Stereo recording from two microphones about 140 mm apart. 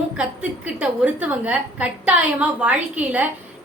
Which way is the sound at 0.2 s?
10° right (ahead or behind).